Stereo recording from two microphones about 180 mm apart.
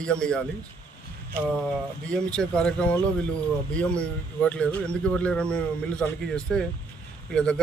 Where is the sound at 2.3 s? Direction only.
5° left (ahead or behind).